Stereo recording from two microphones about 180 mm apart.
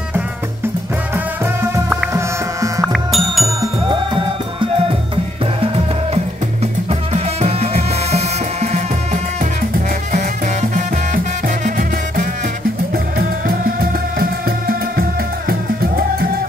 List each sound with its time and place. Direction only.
2.8 s music: centre (ahead or behind)
3.9 s music: 25° right (ahead or behind)
6.9 s music: 35° right (ahead or behind)
11.6 s music: 50° right (ahead or behind)
14.7 s music: 55° right (ahead or behind)